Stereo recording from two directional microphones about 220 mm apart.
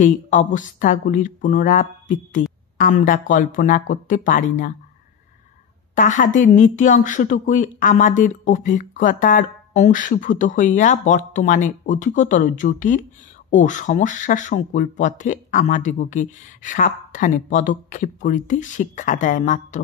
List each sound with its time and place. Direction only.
0.0 s a woman's voice: 35° left (ahead or behind)
5.9 s a woman's voice: 35° left (ahead or behind)